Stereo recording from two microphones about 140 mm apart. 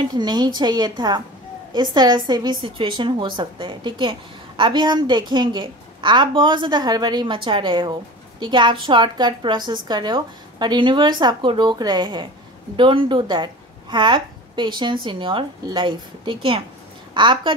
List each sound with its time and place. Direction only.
0.1 s a woman's voice: 30° right (ahead or behind)